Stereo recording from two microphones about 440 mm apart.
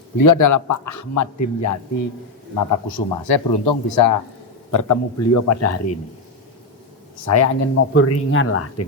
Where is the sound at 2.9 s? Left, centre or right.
Left.